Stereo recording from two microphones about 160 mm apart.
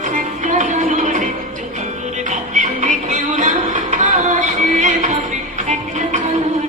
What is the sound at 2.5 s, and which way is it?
Music, 50° right (ahead or behind).